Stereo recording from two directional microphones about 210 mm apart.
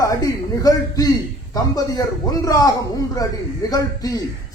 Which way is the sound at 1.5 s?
15° left (ahead or behind).